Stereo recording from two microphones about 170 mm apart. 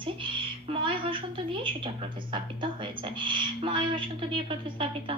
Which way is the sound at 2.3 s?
30° right (ahead or behind).